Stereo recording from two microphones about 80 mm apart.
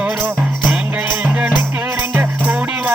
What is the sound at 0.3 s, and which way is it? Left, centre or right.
Music, centre.